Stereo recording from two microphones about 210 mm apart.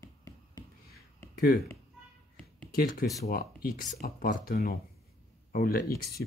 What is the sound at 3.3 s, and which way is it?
Speech, 45° left (ahead or behind).